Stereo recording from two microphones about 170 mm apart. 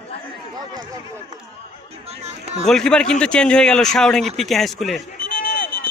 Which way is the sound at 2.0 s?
40° right (ahead or behind).